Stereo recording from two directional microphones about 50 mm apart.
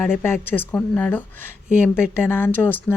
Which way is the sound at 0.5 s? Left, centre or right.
Left.